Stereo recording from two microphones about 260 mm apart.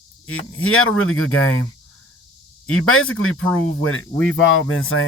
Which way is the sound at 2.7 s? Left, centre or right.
Left.